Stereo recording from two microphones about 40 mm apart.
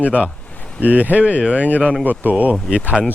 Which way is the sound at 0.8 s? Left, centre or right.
Right.